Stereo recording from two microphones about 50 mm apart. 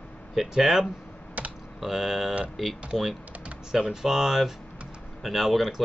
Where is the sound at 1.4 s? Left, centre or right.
Right.